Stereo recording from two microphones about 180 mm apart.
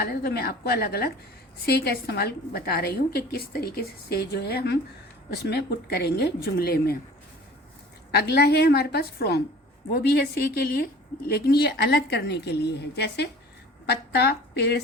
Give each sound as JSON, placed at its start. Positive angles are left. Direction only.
{"t": 0.0, "sound": "a woman's voice", "side_deg": 60}
{"t": 8.1, "sound": "a woman's voice", "side_deg": 65}